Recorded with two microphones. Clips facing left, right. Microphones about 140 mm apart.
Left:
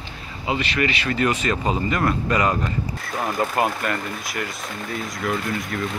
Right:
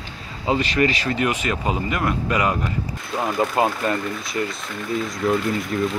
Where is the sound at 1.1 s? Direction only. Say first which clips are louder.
Left 1 dB; 15° right (ahead or behind).